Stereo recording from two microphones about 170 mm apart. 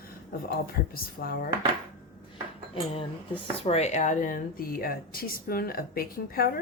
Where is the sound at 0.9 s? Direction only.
60° left (ahead or behind).